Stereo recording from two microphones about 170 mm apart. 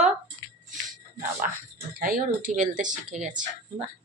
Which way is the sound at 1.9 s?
60° right (ahead or behind).